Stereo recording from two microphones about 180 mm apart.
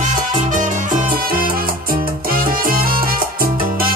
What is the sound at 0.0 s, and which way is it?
Salsa music, 45° right (ahead or behind).